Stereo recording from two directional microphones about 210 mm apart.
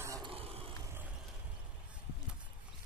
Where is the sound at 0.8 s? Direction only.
10° right (ahead or behind).